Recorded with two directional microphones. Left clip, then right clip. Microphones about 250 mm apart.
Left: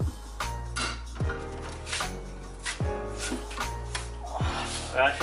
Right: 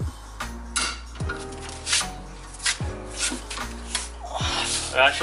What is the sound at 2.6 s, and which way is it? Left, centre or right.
Music, centre.